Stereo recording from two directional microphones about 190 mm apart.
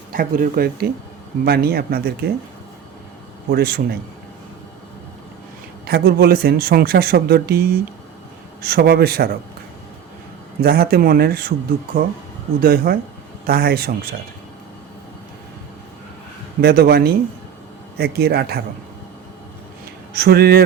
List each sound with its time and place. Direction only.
0.1 s speech: 50° right (ahead or behind)
3.5 s speech: 55° right (ahead or behind)
5.8 s speech: 55° right (ahead or behind)
10.6 s speech: 55° right (ahead or behind)
12.6 s speech: 55° right (ahead or behind)
16.6 s speech: 55° right (ahead or behind)
20.1 s speech: 55° right (ahead or behind)